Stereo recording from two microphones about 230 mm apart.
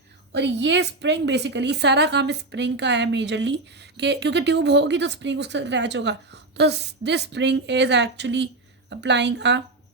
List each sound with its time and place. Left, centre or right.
0.3 s a woman's voice: right